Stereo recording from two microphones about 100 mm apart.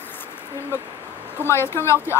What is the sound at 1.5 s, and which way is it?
Speech, 25° left (ahead or behind).